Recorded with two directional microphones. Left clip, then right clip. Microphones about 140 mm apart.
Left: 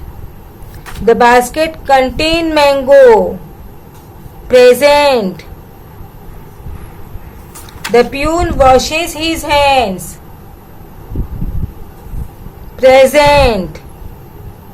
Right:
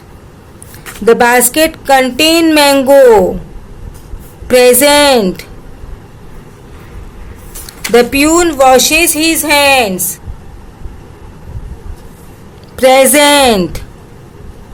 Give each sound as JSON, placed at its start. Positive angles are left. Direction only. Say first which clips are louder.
{"t": 1.0, "sound": "a woman's voice", "louder": "even", "side_deg": -50}
{"t": 4.4, "sound": "speech", "louder": "left 1 dB", "side_deg": -40}
{"t": 7.7, "sound": "a woman's voice", "louder": "right 2 dB", "side_deg": -45}
{"t": 12.7, "sound": "a woman's voice", "louder": "left 1 dB", "side_deg": -50}